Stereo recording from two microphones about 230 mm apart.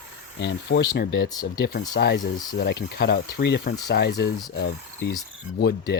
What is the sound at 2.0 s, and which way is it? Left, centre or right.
Speech, left.